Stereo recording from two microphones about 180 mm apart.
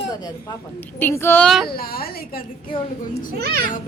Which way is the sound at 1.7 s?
55° left (ahead or behind).